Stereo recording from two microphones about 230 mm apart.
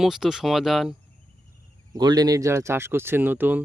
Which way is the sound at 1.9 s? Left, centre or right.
Centre.